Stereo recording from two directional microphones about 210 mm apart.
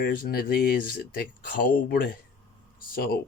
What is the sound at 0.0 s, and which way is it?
Speech, 45° left (ahead or behind).